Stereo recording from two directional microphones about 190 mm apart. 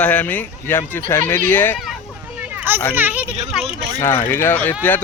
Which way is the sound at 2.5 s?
10° right (ahead or behind).